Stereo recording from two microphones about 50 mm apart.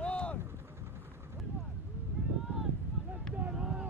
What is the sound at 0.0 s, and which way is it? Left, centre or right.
Vehicle, left.